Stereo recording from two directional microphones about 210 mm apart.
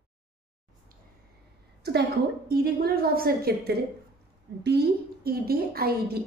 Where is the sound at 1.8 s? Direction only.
50° right (ahead or behind).